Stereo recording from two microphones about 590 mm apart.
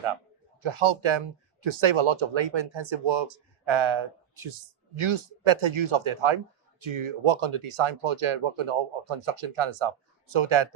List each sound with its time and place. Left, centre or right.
0.6 s speech: right